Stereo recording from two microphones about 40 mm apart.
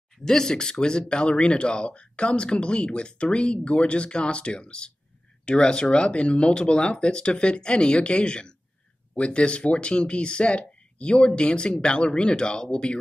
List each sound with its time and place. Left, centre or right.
0.2 s speech: centre